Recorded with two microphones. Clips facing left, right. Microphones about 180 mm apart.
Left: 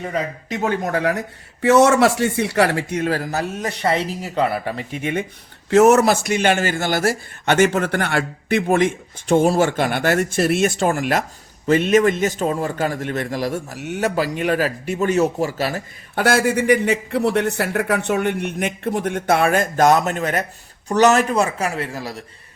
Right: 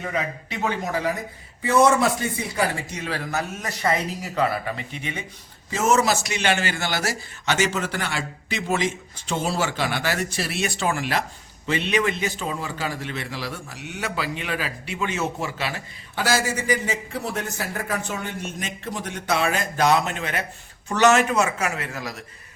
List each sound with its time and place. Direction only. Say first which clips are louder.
0.1 s a man's voice: left 3 dB; 45° left (ahead or behind); by 1.2 s 65° left (ahead or behind)
1.6 s a man's voice: left 5 dB; 80° left; by 4.7 s 30° left (ahead or behind)
5.7 s a man's voice: left 8 dB; 65° left (ahead or behind); by 22.2 s 35° left (ahead or behind)